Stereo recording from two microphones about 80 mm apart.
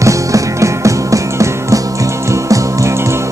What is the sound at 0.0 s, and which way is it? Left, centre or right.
Music, right.